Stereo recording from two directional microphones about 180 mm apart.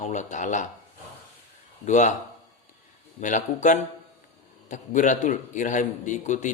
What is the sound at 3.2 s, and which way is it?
Speech, 45° left (ahead or behind).